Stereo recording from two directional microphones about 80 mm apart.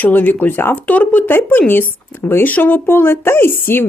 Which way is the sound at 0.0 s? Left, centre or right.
Left.